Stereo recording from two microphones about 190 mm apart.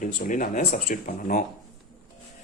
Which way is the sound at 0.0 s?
45° left (ahead or behind).